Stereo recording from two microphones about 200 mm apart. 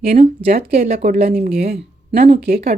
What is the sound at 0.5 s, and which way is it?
Speech, 50° right (ahead or behind).